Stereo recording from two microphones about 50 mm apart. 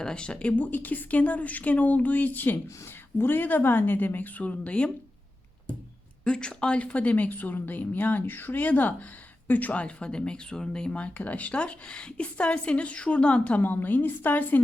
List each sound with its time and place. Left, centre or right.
0.0 s speech: centre
0.5 s speech: left
6.2 s speech: centre
13.6 s speech: left